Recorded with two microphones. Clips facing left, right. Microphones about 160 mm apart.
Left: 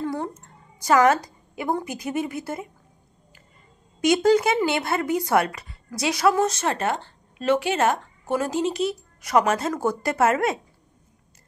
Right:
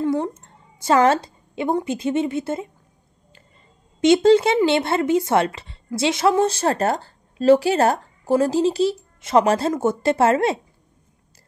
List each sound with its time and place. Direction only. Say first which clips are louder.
0.0 s a woman's voice: right 6 dB; 20° right (ahead or behind)
4.0 s speech: right 4 dB; 25° right (ahead or behind)